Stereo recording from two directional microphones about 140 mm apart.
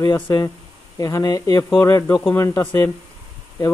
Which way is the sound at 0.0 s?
30° left (ahead or behind).